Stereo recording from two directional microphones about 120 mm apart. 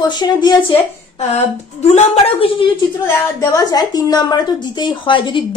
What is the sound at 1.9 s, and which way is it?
Speech, 55° left (ahead or behind).